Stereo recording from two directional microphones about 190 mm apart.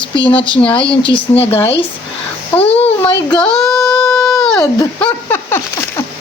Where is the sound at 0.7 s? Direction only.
25° left (ahead or behind).